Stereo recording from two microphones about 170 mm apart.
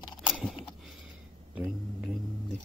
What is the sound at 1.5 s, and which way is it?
Speech, 5° right (ahead or behind).